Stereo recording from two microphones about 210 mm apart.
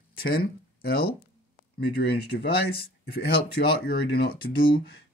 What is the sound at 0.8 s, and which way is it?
Speech, 45° left (ahead or behind).